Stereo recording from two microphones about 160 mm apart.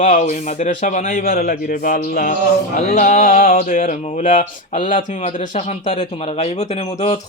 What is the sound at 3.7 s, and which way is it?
Speech, 60° left (ahead or behind).